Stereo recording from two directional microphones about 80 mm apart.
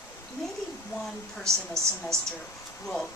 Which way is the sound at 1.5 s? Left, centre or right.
Right.